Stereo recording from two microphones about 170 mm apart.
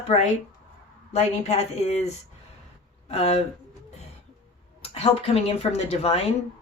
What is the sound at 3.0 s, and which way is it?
Speech, 35° left (ahead or behind).